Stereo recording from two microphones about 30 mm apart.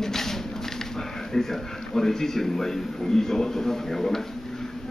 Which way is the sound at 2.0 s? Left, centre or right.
Centre.